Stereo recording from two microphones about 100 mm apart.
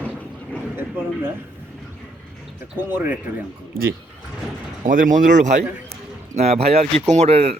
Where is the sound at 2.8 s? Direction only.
20° right (ahead or behind).